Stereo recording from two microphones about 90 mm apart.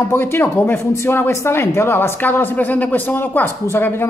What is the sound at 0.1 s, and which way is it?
Speech, 25° left (ahead or behind).